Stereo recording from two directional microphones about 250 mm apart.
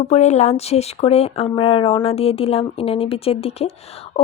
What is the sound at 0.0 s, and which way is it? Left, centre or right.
Speech, left.